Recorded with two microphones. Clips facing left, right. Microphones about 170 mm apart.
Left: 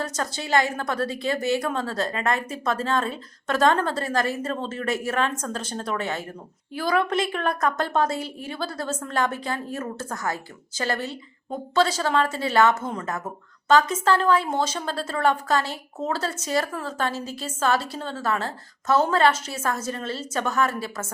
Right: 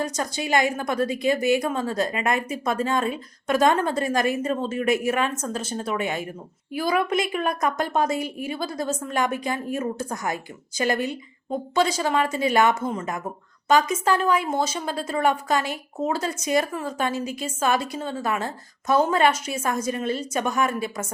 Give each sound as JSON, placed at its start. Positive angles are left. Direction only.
{"t": 0.0, "sound": "a woman's voice", "side_deg": -15}